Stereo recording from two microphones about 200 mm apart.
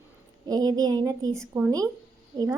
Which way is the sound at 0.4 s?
20° right (ahead or behind).